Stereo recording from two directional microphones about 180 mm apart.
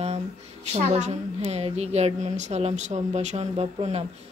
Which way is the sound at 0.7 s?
40° right (ahead or behind).